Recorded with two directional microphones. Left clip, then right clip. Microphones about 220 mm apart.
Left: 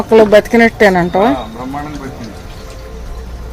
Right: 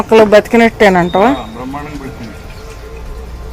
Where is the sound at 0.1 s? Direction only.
Centre (ahead or behind).